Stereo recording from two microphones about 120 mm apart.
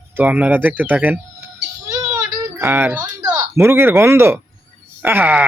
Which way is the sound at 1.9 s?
25° right (ahead or behind).